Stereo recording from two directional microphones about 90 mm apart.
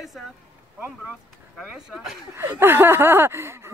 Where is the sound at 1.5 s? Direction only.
5° right (ahead or behind).